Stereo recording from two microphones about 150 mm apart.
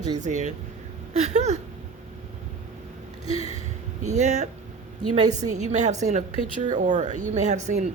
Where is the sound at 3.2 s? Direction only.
40° left (ahead or behind).